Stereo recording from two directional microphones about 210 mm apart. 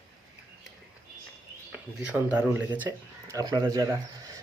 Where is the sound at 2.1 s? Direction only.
10° right (ahead or behind).